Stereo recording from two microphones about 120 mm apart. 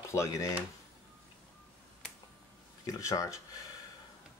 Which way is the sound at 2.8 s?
25° left (ahead or behind).